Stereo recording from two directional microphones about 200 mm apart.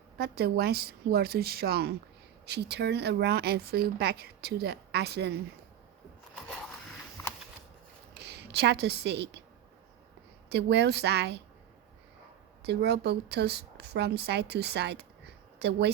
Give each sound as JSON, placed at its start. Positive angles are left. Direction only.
{"t": 0.2, "sound": "speech", "side_deg": -50}
{"t": 8.1, "sound": "speech", "side_deg": -55}
{"t": 10.5, "sound": "speech", "side_deg": -55}
{"t": 12.6, "sound": "speech", "side_deg": -55}